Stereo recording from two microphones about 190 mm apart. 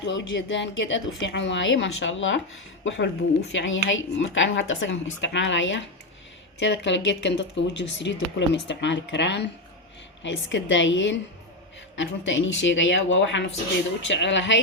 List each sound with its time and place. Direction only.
0.0 s speech: 70° left (ahead or behind)